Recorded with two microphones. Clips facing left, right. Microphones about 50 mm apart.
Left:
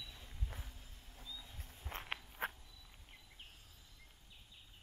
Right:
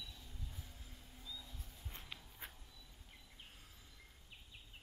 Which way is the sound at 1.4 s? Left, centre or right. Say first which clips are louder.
Left 1 dB; left.